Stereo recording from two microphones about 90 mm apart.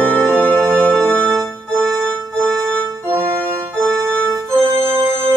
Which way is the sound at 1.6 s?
10° left (ahead or behind).